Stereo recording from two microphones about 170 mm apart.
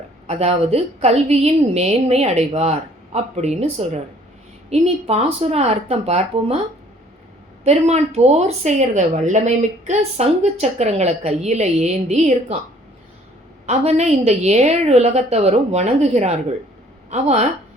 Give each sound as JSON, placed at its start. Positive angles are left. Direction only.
{"t": 0.3, "sound": "a woman's voice", "side_deg": -35}
{"t": 7.6, "sound": "a woman's voice", "side_deg": -40}
{"t": 13.7, "sound": "a woman's voice", "side_deg": -40}